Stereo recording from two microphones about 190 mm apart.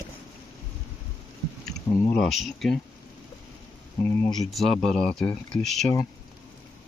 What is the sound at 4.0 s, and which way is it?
Speech, 10° left (ahead or behind).